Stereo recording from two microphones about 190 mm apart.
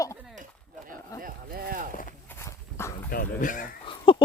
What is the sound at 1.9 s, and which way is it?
Walk, 45° left (ahead or behind).